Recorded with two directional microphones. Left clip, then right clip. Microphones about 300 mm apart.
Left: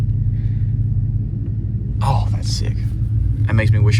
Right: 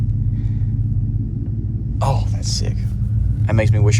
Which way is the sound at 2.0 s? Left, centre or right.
Centre.